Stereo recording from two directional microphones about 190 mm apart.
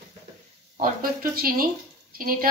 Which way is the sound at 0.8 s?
50° right (ahead or behind).